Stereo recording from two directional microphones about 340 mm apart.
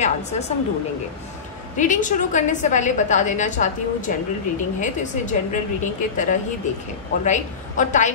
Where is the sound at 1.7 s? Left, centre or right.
Left.